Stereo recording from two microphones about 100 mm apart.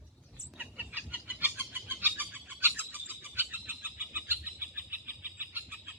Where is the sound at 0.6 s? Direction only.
15° right (ahead or behind).